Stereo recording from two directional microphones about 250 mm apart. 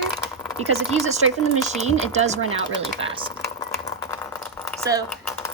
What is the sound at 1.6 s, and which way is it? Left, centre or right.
Speech, right.